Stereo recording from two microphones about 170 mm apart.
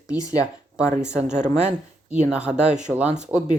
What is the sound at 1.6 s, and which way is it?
Speech, 5° right (ahead or behind).